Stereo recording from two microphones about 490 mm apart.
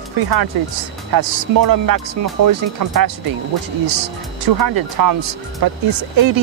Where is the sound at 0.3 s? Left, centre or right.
Right.